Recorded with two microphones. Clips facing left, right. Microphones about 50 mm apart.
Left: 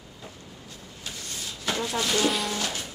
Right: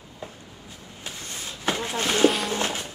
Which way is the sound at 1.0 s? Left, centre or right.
Right.